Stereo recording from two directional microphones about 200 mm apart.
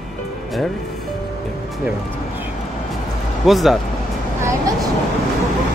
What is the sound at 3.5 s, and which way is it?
Speech, centre (ahead or behind).